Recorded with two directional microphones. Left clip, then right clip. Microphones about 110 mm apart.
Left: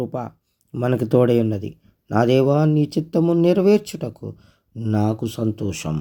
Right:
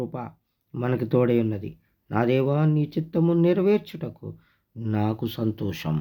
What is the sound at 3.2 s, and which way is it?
Speech, 50° left (ahead or behind).